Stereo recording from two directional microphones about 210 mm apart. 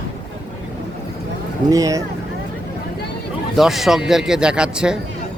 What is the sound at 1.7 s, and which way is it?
Speech, 15° right (ahead or behind).